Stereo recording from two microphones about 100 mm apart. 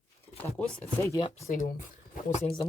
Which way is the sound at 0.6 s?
15° left (ahead or behind).